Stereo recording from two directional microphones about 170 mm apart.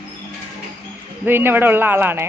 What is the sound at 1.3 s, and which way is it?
Speech, 10° right (ahead or behind).